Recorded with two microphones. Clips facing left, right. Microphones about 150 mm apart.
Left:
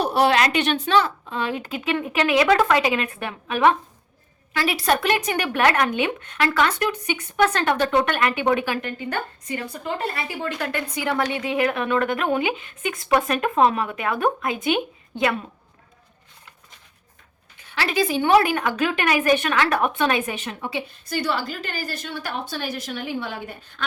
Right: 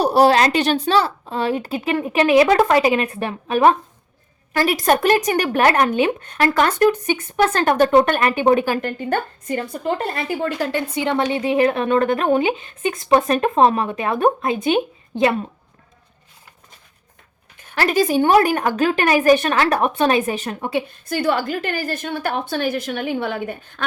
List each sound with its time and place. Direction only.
0.0 s a woman's voice: 35° right (ahead or behind)
10.4 s a woman's voice: 30° right (ahead or behind)
17.6 s speech: 45° right (ahead or behind)